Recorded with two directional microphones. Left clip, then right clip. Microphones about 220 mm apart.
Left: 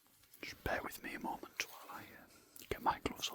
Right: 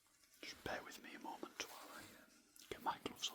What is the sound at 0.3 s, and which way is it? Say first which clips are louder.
Whispering: left 7 dB; 35° left (ahead or behind).